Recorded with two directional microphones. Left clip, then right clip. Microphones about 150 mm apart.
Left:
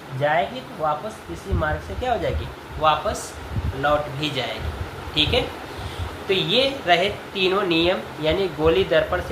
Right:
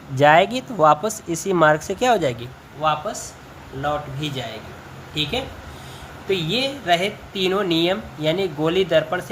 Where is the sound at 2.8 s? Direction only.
55° right (ahead or behind).